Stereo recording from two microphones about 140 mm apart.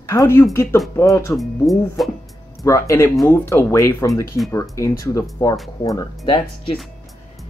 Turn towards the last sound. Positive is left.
turn(degrees=35)  # may be behind; listen again after turning